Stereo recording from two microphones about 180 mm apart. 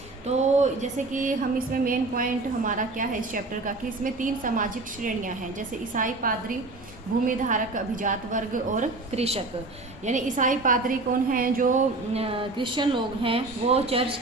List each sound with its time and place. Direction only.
0.3 s a woman's voice: 40° right (ahead or behind)